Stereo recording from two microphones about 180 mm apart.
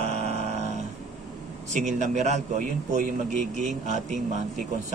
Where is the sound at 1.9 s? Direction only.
40° right (ahead or behind).